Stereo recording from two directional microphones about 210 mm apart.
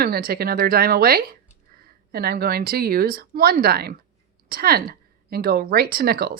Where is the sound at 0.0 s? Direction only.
45° right (ahead or behind).